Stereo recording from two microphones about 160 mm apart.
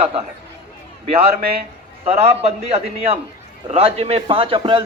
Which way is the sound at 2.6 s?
40° right (ahead or behind).